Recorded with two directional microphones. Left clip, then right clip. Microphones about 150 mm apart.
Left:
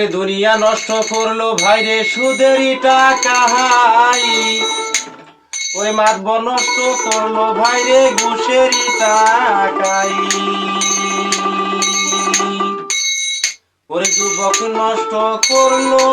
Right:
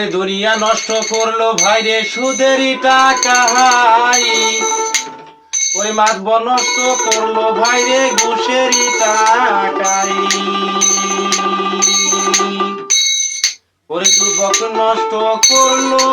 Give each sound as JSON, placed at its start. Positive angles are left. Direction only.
{"t": 2.4, "sound": "music", "side_deg": -15}